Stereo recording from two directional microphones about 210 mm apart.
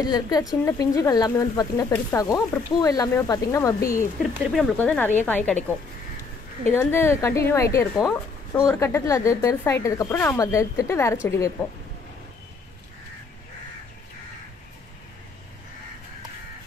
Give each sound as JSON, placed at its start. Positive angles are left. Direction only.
{"t": 0.0, "sound": "speech", "side_deg": 20}
{"t": 4.2, "sound": "speech", "side_deg": 0}
{"t": 6.7, "sound": "speech", "side_deg": 10}
{"t": 8.0, "sound": "speech", "side_deg": 0}
{"t": 8.7, "sound": "speech", "side_deg": 15}